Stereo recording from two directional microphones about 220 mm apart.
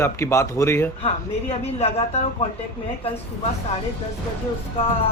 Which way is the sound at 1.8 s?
30° left (ahead or behind).